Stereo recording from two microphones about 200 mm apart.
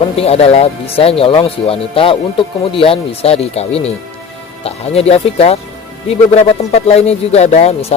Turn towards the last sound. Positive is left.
turn(degrees=30)  # may be behind; listen again after turning